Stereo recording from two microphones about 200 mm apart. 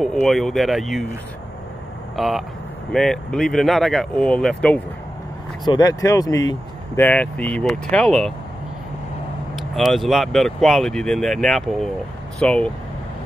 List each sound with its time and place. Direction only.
0.0 s speech: centre (ahead or behind)
2.1 s speech: centre (ahead or behind)
5.7 s speech: 15° left (ahead or behind)
9.6 s speech: centre (ahead or behind)